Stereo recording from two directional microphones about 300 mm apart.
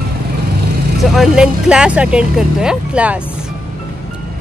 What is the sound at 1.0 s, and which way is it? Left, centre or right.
Speech, centre.